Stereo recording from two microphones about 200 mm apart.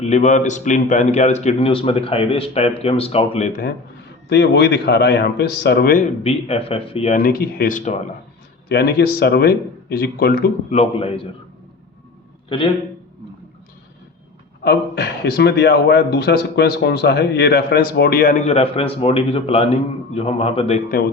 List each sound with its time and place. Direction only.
0.0 s a man's voice: 35° left (ahead or behind)
4.3 s a man's voice: 60° left (ahead or behind)
6.2 s a man's voice: 30° left (ahead or behind)
7.2 s speech: 45° left (ahead or behind)
8.7 s speech: 50° left (ahead or behind)
10.8 s a man's voice: 30° left (ahead or behind)
14.6 s speech: 55° left (ahead or behind); by 20.8 s 30° left (ahead or behind)